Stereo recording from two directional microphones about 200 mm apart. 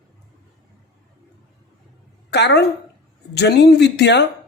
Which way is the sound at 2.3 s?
55° left (ahead or behind).